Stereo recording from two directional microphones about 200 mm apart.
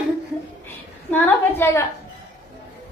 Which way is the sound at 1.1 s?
10° left (ahead or behind).